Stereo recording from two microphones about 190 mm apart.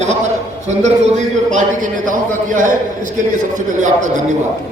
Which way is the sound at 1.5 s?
40° right (ahead or behind).